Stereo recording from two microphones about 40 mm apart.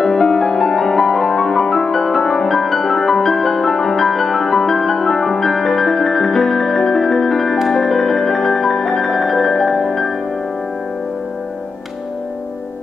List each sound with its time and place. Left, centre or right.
0.0 s music: centre